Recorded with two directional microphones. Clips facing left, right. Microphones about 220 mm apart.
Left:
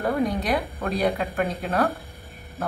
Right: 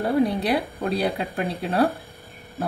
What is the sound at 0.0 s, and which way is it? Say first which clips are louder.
Speech: right 3 dB; 30° right (ahead or behind).